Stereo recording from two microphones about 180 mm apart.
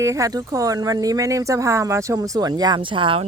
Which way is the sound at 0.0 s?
15° right (ahead or behind).